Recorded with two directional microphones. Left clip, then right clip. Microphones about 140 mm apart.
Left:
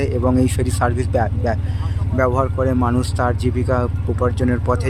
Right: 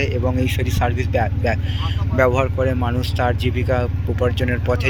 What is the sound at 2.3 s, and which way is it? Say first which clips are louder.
Speech: even; 20° left (ahead or behind).